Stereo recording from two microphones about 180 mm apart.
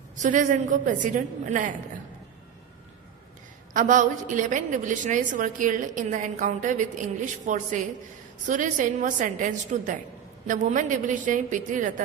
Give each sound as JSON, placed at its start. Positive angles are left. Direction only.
{"t": 0.2, "sound": "a woman's voice", "side_deg": -45}
{"t": 3.8, "sound": "a woman's voice", "side_deg": -45}